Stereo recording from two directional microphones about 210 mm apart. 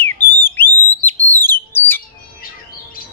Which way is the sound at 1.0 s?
10° left (ahead or behind).